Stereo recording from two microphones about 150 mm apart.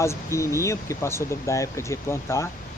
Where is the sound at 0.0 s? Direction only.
20° left (ahead or behind).